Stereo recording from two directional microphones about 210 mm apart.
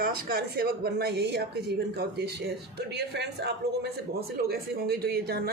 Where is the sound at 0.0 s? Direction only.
45° right (ahead or behind).